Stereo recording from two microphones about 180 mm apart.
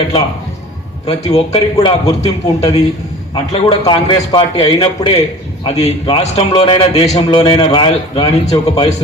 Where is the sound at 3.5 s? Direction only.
25° left (ahead or behind).